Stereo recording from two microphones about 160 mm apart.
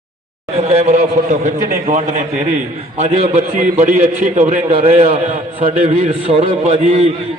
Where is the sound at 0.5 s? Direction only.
40° right (ahead or behind).